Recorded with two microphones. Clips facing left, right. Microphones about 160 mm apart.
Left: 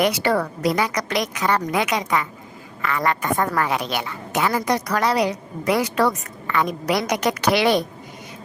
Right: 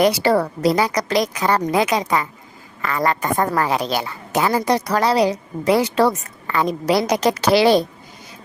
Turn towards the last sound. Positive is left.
turn(degrees=-30)  # may be behind; listen again after turning